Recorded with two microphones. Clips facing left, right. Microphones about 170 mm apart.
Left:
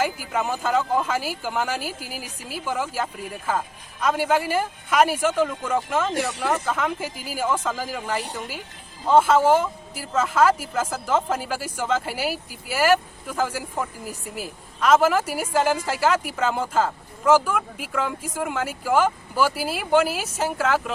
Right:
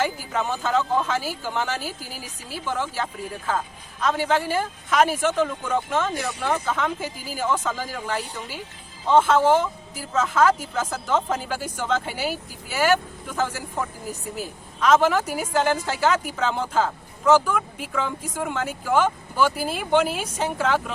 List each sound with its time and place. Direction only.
0.0 s speech: 5° left (ahead or behind)